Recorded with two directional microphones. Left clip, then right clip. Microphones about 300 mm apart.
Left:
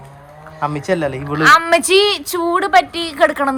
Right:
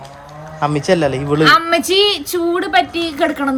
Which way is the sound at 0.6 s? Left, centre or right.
Centre.